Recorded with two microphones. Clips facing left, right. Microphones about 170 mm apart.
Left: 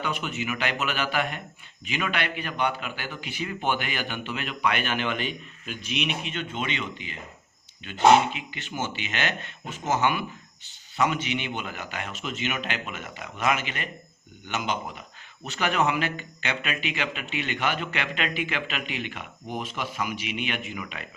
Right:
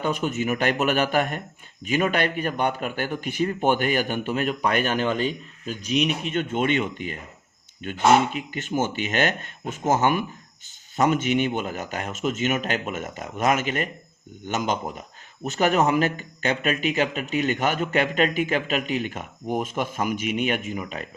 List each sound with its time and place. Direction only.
0.0 s a man's voice: 45° right (ahead or behind)